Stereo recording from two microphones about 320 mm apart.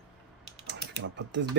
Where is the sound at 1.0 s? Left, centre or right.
Right.